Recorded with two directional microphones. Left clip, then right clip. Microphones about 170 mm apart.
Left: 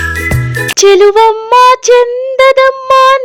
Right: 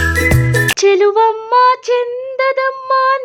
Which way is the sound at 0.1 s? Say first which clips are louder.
Right 1 dB; centre (ahead or behind).